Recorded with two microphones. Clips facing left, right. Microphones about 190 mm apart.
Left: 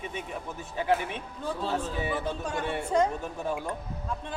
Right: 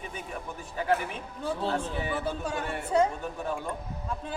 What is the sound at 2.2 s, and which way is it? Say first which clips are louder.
Speech: even; 10° right (ahead or behind).